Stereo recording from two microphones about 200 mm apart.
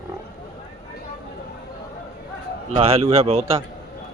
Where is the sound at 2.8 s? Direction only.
30° right (ahead or behind).